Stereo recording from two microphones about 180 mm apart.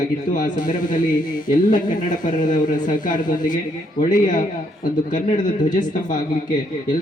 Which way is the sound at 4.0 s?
45° left (ahead or behind).